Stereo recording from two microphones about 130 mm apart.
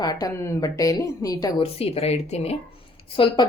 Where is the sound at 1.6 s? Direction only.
50° left (ahead or behind).